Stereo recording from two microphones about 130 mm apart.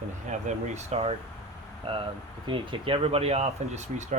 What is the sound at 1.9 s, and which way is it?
Speech, 40° right (ahead or behind).